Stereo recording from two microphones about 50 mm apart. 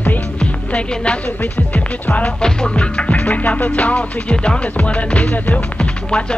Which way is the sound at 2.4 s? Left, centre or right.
Left.